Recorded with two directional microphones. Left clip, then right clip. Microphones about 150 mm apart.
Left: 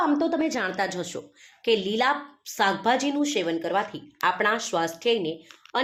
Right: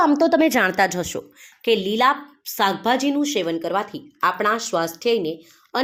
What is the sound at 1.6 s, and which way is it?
A woman's voice, 35° right (ahead or behind).